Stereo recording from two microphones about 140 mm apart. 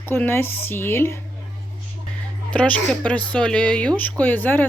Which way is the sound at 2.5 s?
10° left (ahead or behind).